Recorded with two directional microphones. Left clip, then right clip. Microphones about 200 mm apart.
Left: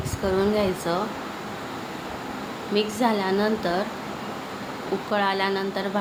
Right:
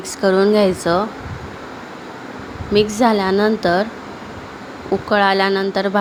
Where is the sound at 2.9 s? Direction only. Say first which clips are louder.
Right 8 dB; 35° right (ahead or behind).